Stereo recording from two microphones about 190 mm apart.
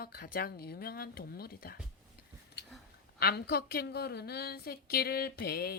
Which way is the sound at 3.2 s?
55° left (ahead or behind).